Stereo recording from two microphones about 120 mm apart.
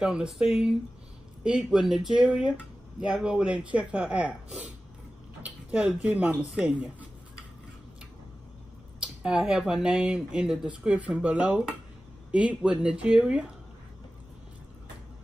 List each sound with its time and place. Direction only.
0.0 s speech: 5° right (ahead or behind)
9.0 s speech: 10° right (ahead or behind)